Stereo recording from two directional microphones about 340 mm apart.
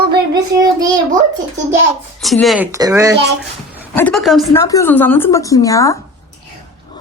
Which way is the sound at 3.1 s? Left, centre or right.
Right.